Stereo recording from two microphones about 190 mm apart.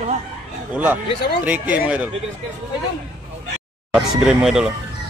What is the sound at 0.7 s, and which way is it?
Speech, 5° right (ahead or behind).